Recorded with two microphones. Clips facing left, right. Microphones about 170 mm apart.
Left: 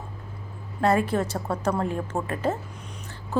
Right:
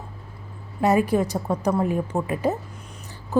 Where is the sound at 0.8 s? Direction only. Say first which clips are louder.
Right 3 dB; 15° right (ahead or behind).